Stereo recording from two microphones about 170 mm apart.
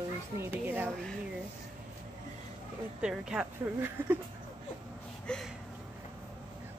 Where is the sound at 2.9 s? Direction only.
5° right (ahead or behind).